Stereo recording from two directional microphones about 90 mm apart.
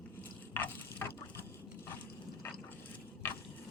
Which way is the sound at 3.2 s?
25° left (ahead or behind).